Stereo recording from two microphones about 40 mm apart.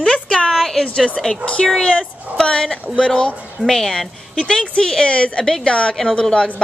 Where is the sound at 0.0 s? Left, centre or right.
Left.